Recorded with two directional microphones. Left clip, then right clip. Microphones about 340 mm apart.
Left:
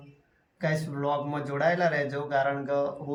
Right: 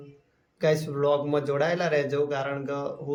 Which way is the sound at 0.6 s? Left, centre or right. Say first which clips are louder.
Right 6 dB; centre.